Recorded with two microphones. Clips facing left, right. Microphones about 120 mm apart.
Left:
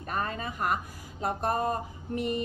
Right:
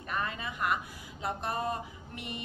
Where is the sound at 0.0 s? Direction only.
40° left (ahead or behind).